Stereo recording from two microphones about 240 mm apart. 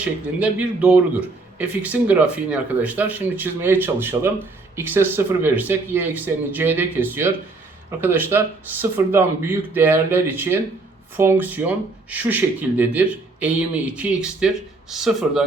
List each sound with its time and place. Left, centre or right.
0.0 s speech: centre